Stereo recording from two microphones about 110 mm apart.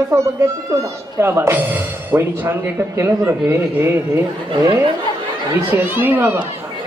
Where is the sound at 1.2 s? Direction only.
20° right (ahead or behind).